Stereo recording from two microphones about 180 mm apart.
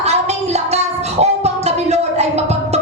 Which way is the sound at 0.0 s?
35° right (ahead or behind).